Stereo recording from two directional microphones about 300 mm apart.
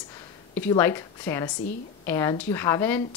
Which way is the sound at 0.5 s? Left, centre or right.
Centre.